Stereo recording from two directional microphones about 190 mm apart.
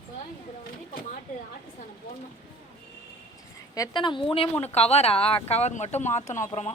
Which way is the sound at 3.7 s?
20° left (ahead or behind).